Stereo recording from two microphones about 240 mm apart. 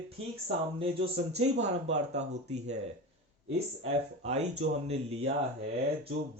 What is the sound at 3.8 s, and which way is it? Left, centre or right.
Speech, right.